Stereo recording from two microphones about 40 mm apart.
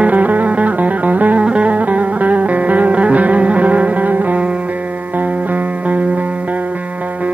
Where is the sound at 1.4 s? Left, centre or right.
Right.